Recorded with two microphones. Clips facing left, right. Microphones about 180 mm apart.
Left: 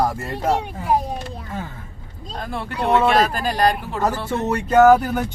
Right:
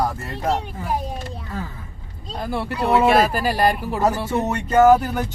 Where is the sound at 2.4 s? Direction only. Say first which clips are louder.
Right 2 dB; 5° right (ahead or behind).